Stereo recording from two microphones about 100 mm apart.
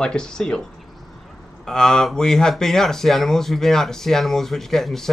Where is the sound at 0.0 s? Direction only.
5° left (ahead or behind).